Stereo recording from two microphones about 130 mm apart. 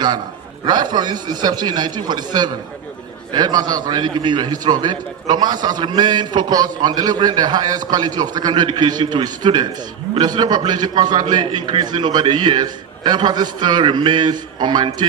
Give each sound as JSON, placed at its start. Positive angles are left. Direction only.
{"t": 0.7, "sound": "a man's voice", "side_deg": -35}